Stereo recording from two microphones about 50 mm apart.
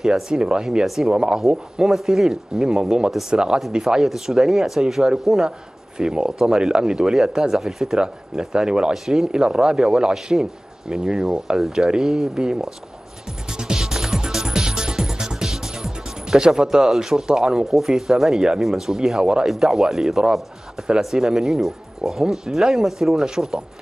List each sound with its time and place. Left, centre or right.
0.0 s speech: centre
1.9 s speech: centre
13.5 s music: centre
18.6 s speech: centre
19.4 s speech: centre